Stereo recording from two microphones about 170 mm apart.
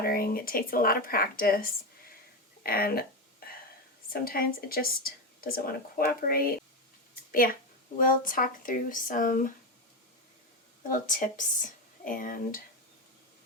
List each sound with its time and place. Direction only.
0.0 s speech: 60° left (ahead or behind)
2.6 s a sound: 60° left (ahead or behind)
4.1 s a woman's voice: 60° left (ahead or behind)
10.8 s speech: 50° left (ahead or behind)